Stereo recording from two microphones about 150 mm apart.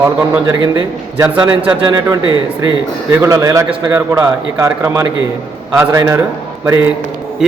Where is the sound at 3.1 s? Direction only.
20° right (ahead or behind).